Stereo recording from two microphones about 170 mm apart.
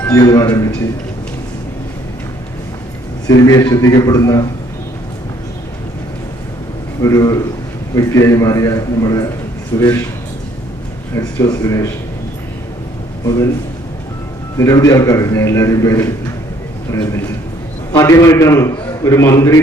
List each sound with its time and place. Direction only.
0.0 s a man's voice: 20° left (ahead or behind)
3.2 s a man's voice: 20° left (ahead or behind)
7.0 s a man's voice: 20° left (ahead or behind)
11.1 s a man's voice: 15° left (ahead or behind)
13.2 s a man's voice: 20° left (ahead or behind)
14.6 s a man's voice: 20° left (ahead or behind)